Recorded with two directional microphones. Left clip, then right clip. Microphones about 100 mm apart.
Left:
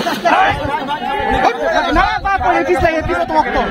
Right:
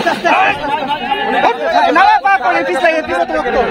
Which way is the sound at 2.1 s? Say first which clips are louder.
Right 4 dB; 90° right.